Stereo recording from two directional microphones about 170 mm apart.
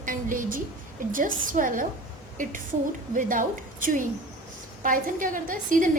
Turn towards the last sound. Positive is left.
turn(degrees=-50)  # may be behind; listen again after turning